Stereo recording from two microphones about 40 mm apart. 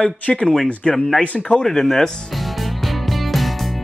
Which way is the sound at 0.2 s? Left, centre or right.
Left.